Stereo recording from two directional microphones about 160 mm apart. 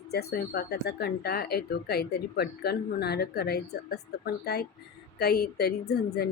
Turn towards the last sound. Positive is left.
turn(degrees=85)